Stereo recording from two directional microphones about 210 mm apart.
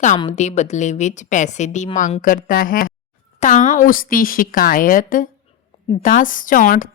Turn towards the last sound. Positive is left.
turn(degrees=40)  # may be behind; listen again after turning